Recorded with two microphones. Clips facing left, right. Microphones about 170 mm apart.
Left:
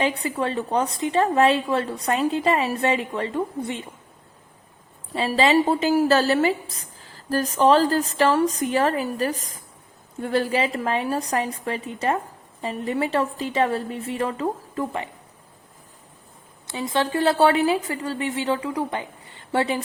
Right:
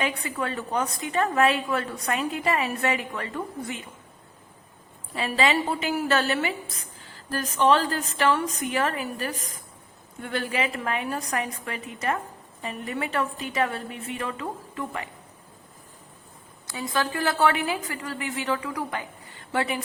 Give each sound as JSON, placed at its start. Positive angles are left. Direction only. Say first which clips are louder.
{"t": 0.0, "sound": "a woman's voice", "louder": "left 5 dB", "side_deg": 30}
{"t": 5.1, "sound": "a woman's voice", "louder": "left 5 dB", "side_deg": 30}
{"t": 16.6, "sound": "a woman's voice", "louder": "left 4 dB", "side_deg": 25}